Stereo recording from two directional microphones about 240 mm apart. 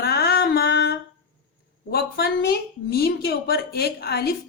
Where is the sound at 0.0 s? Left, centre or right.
Left.